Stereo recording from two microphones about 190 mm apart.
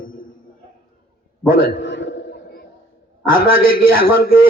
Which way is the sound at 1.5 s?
70° left (ahead or behind).